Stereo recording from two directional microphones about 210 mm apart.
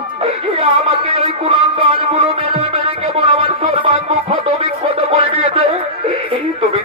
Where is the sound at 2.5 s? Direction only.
25° right (ahead or behind).